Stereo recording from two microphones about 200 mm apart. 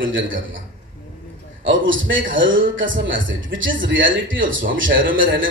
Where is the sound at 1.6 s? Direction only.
70° right (ahead or behind).